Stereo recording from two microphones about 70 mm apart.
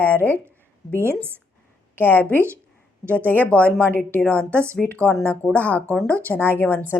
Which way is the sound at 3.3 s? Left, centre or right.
Left.